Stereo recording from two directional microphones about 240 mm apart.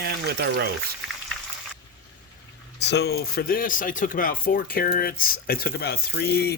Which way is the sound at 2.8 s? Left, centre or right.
Left.